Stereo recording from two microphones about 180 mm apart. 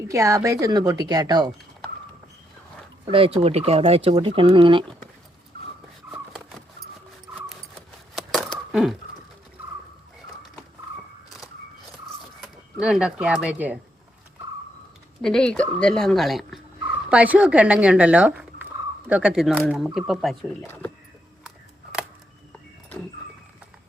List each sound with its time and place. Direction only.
0.1 s a woman's voice: 15° right (ahead or behind)
3.1 s a woman's voice: 30° right (ahead or behind)
8.1 s a sound: centre (ahead or behind)
12.4 s speech: 5° right (ahead or behind)
15.2 s speech: 5° left (ahead or behind)